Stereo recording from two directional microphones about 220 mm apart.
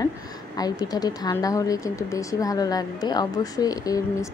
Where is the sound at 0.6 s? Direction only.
15° left (ahead or behind).